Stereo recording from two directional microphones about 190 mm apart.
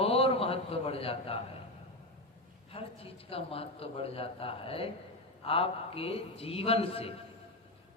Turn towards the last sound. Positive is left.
turn(degrees=30)  # may be behind; listen again after turning